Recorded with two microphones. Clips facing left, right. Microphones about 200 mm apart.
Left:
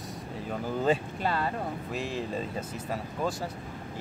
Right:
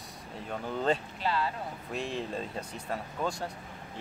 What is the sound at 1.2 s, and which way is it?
Speech, 50° left (ahead or behind).